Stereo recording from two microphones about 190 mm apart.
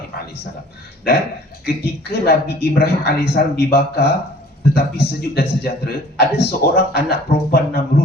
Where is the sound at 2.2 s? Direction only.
55° left (ahead or behind).